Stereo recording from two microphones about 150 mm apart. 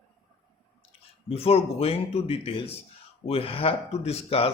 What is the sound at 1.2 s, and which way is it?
Speech, 40° left (ahead or behind).